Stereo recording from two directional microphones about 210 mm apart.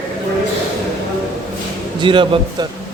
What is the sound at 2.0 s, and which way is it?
Speech, 25° right (ahead or behind).